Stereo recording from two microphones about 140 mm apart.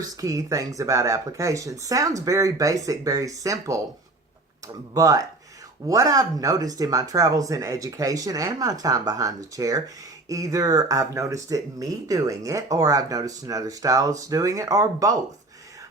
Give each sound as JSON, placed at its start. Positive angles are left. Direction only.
{"t": 0.0, "sound": "speech", "side_deg": -25}
{"t": 4.9, "sound": "speech", "side_deg": -25}